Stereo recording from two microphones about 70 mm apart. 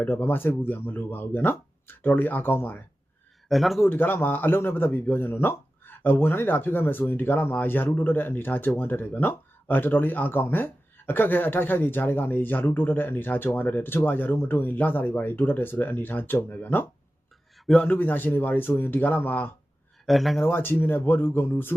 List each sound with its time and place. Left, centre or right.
0.0 s speech: left
3.5 s speech: centre
3.8 s speech: left
17.8 s speech: left
20.1 s speech: centre
20.4 s speech: left